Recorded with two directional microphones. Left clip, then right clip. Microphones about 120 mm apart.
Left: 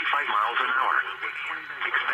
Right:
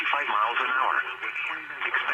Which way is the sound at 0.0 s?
50° left (ahead or behind).